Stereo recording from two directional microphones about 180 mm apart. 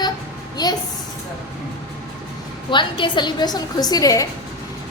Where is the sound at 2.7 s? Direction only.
25° left (ahead or behind).